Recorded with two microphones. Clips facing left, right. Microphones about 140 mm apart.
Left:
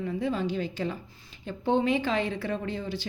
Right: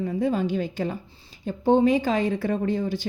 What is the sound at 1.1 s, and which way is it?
A woman's voice, 35° right (ahead or behind).